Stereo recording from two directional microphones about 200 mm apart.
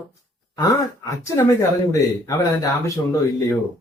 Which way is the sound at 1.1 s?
15° left (ahead or behind).